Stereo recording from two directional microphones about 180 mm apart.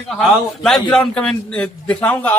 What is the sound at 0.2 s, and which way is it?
A man's voice, centre (ahead or behind).